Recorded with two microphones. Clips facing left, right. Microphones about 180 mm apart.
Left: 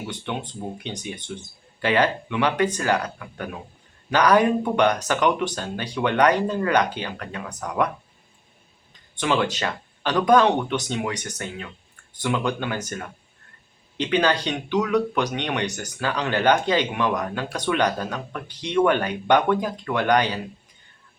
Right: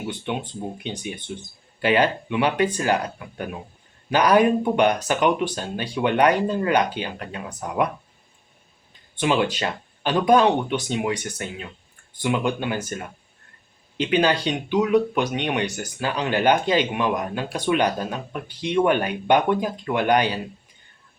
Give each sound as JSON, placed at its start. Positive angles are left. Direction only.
{"t": 0.9, "sound": "speech", "side_deg": -15}
{"t": 7.2, "sound": "speech", "side_deg": -25}
{"t": 9.2, "sound": "speech", "side_deg": -15}